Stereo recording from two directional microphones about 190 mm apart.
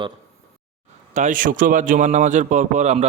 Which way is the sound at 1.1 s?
40° right (ahead or behind).